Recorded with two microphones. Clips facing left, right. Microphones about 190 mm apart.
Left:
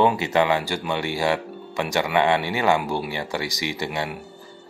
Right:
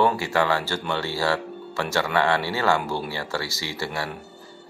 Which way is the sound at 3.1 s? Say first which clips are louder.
Left 2 dB; 15° left (ahead or behind).